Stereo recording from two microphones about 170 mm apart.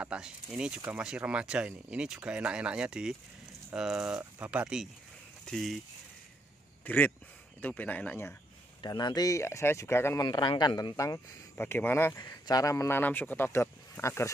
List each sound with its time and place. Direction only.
0.0 s speech: 5° right (ahead or behind)
6.8 s a sound: 10° left (ahead or behind)
7.6 s speech: 10° left (ahead or behind)
8.8 s speech: 25° left (ahead or behind)